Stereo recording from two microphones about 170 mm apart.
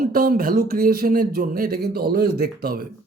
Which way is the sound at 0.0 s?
60° right (ahead or behind).